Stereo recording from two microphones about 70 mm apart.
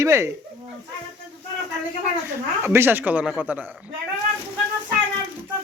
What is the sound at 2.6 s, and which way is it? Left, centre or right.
Speech, right.